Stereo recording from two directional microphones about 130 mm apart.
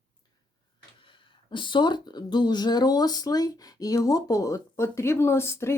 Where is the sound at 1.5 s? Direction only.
40° left (ahead or behind).